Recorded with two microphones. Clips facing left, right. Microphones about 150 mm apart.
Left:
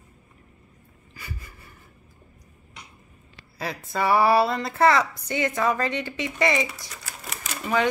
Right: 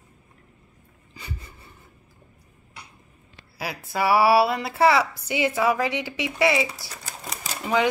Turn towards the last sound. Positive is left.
turn(degrees=-10)  # may be behind; listen again after turning